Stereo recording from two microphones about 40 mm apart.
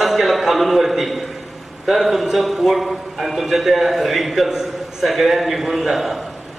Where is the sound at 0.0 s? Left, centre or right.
Centre.